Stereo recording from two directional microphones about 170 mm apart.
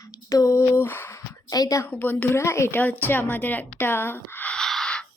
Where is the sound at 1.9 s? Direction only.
10° left (ahead or behind).